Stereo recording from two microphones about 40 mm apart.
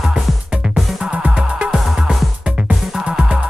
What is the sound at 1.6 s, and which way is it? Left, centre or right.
Music, right.